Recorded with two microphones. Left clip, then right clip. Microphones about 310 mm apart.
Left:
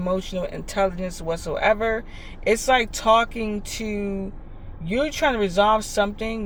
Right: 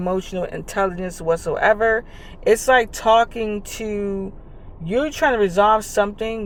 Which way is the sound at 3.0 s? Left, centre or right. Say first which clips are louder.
Right 3 dB; centre.